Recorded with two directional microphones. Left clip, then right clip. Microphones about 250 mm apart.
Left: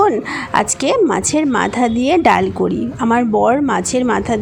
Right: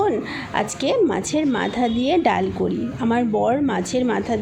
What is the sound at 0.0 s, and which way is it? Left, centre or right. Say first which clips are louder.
A woman's voice: left 7 dB; left.